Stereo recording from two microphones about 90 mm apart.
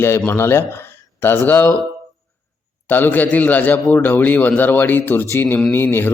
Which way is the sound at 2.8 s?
20° left (ahead or behind).